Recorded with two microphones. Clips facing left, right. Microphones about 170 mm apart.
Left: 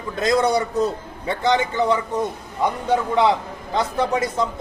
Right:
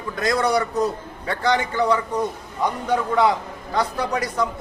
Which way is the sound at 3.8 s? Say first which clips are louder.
Left 2 dB; 25° left (ahead or behind).